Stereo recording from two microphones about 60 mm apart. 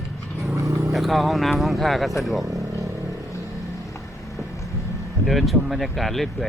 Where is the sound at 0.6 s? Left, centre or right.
Right.